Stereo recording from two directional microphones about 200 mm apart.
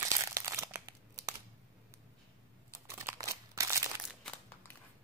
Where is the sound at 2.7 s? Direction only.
15° right (ahead or behind).